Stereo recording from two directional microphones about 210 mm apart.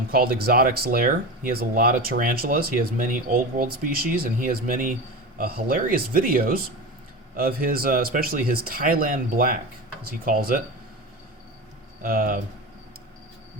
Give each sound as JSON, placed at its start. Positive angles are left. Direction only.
{"t": 0.1, "sound": "speech", "side_deg": -45}
{"t": 12.0, "sound": "speech", "side_deg": -40}